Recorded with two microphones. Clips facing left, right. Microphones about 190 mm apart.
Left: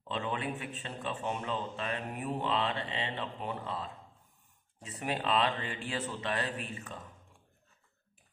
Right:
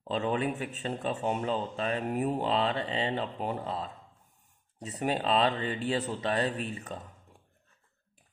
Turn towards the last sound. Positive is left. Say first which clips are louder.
# right 5 dB
turn(degrees=-35)  # may be behind; listen again after turning